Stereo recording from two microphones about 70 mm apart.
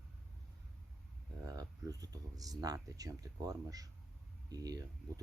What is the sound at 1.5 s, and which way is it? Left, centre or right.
Speech, right.